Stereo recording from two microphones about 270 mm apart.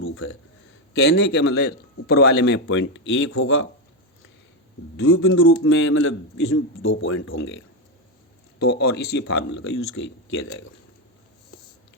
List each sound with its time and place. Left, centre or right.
0.0 s a sound: left
1.0 s a man's voice: left
4.9 s a man's voice: left